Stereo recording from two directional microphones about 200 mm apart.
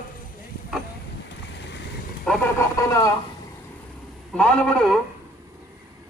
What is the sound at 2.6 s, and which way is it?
Speech, 15° left (ahead or behind).